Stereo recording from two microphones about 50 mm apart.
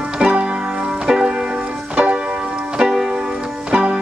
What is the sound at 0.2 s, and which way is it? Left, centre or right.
Music, right.